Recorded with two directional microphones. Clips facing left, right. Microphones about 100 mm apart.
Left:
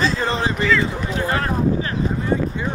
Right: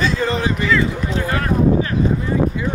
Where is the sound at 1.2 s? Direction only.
30° left (ahead or behind).